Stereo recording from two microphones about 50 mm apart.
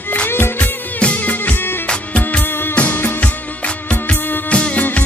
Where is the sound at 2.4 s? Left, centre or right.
Left.